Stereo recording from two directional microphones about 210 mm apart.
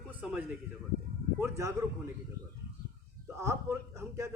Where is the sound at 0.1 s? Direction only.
5° right (ahead or behind).